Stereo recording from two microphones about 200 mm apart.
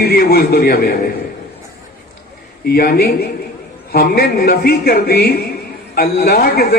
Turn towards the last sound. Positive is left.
turn(degrees=50)  # may be behind; listen again after turning